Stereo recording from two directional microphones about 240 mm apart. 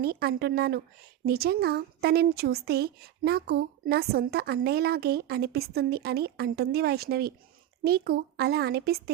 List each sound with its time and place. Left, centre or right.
0.0 s speech: right